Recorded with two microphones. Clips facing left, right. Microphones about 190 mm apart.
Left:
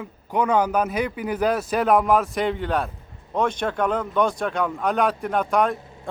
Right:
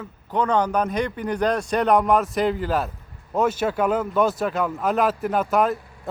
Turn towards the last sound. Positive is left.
turn(degrees=25)  # may be behind; listen again after turning